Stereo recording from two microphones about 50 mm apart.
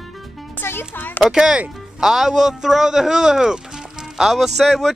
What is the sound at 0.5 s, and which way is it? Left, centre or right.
Speech, left.